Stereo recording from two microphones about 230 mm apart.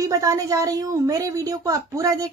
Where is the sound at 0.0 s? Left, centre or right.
Centre.